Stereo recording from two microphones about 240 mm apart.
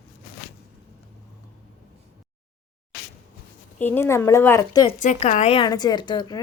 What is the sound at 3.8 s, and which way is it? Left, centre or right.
A woman's voice, centre.